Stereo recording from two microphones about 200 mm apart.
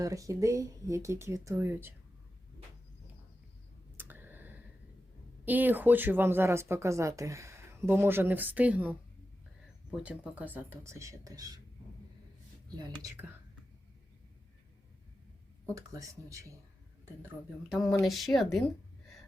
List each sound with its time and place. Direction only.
0.0 s speech: 15° right (ahead or behind)
3.9 s a sound: 10° right (ahead or behind)
5.5 s speech: 10° right (ahead or behind)
10.0 s speech: 5° right (ahead or behind)
15.7 s speech: 15° right (ahead or behind)
17.2 s a woman's voice: centre (ahead or behind)